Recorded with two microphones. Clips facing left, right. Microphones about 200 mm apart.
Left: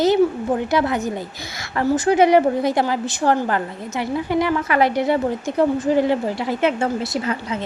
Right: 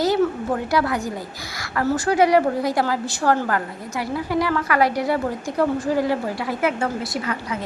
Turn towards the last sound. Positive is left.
turn(degrees=25)  # may be behind; listen again after turning